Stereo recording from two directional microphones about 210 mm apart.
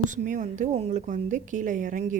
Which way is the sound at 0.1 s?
35° right (ahead or behind).